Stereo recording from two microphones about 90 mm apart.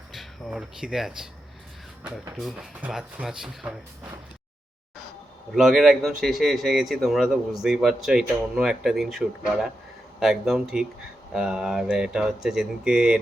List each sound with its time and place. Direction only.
0.1 s speech: centre (ahead or behind)
5.5 s speech: centre (ahead or behind)